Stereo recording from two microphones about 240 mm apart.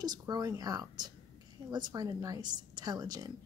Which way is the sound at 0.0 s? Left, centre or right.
Centre.